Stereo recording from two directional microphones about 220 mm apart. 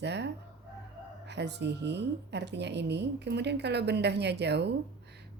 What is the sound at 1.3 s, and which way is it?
A woman's voice, 50° right (ahead or behind).